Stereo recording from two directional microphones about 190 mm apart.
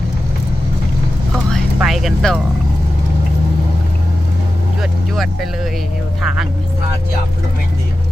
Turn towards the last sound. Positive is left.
turn(degrees=0)  # may be behind; listen again after turning